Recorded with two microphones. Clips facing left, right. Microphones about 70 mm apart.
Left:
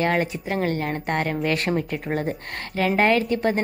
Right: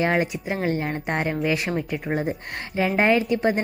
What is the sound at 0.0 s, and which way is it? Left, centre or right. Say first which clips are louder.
A woman's voice: even; centre.